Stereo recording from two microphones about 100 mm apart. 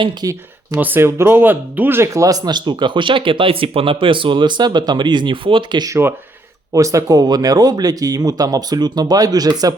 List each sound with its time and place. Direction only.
0.2 s speech: 40° right (ahead or behind)
0.8 s speech: 20° right (ahead or behind); by 5.8 s 55° right (ahead or behind)
6.0 s speech: 20° right (ahead or behind)
6.7 s speech: 35° right (ahead or behind)